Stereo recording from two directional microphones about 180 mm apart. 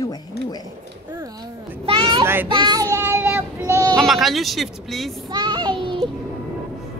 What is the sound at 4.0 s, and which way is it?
Speech, centre (ahead or behind).